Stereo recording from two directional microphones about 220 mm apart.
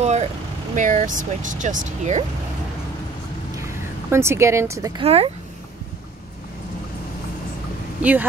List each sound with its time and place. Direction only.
0.0 s vehicle: 30° right (ahead or behind)
0.7 s speech: 35° right (ahead or behind)
3.5 s speech: 10° right (ahead or behind)
5.0 s speech: 25° right (ahead or behind)
8.0 s speech: 5° right (ahead or behind)